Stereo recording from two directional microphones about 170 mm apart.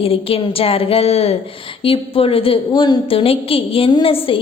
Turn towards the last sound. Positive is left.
turn(degrees=30)  # may be behind; listen again after turning